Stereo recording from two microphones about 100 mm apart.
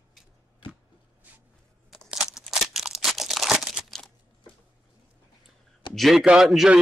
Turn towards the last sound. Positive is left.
turn(degrees=-5)  # may be behind; listen again after turning